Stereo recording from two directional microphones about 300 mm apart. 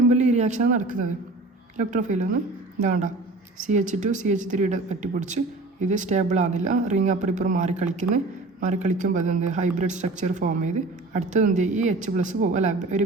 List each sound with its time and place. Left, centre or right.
0.1 s a woman's voice: right